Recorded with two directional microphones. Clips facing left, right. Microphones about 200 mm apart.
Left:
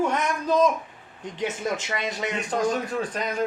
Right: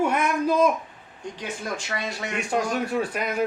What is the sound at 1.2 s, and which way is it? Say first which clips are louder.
Speech: left 4 dB; 20° left (ahead or behind).